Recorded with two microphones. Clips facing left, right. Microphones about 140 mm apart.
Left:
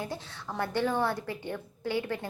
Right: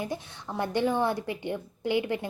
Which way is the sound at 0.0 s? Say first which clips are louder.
Right 3 dB; 15° right (ahead or behind).